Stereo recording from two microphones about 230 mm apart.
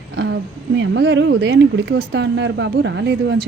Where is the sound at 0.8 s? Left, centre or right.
Right.